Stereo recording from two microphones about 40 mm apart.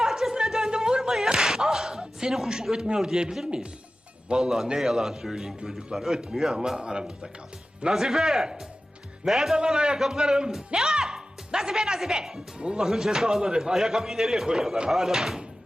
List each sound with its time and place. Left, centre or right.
0.0 s a sound: centre
4.3 s speech: centre
9.6 s speech: centre
12.5 s speech: right
12.8 s speech: centre